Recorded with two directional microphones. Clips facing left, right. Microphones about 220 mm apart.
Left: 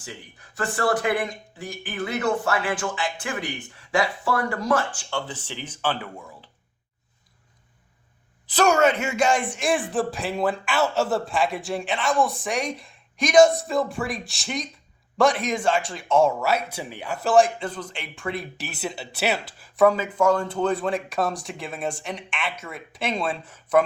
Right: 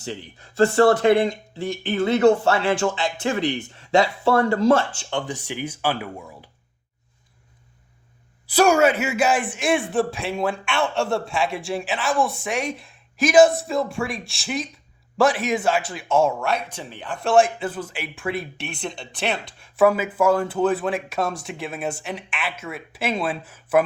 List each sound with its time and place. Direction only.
0.0 s speech: 25° right (ahead or behind); by 6.1 s 10° right (ahead or behind)
8.4 s speech: 10° right (ahead or behind)